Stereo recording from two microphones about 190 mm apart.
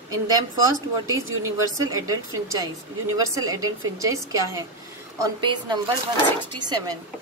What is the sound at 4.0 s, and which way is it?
A woman's voice, 15° right (ahead or behind).